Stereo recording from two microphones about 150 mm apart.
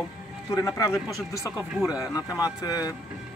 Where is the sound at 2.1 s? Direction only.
25° left (ahead or behind).